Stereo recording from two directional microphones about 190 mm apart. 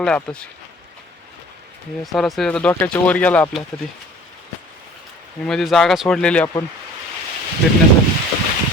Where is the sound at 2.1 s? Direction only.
Centre (ahead or behind).